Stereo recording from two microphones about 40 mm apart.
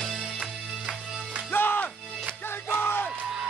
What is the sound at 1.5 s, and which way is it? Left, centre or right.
Music, left.